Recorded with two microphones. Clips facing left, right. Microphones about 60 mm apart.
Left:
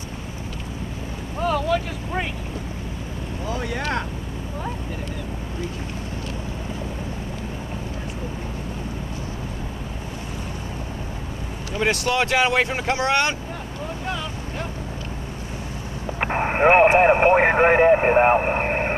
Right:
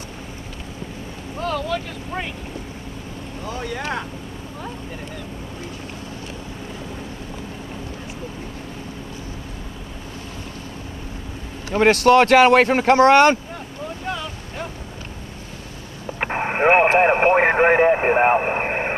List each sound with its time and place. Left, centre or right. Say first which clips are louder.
1.4 s speech: left 3 dB; centre
3.4 s speech: left 1 dB; centre
11.7 s speech: right 9 dB; right
14.0 s boat: right 1 dB; centre
16.2 s vehicle: left 1 dB; centre
17.0 s radio: even; centre